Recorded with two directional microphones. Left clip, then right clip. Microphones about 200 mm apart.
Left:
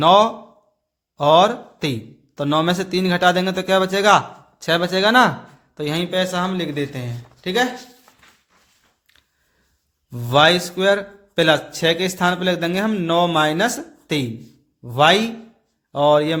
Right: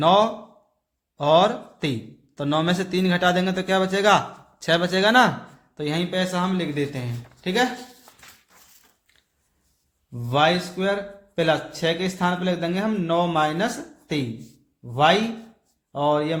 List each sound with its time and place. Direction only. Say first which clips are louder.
0.0 s a man's voice: left 5 dB; 25° left (ahead or behind)
10.1 s a man's voice: left 6 dB; 45° left (ahead or behind)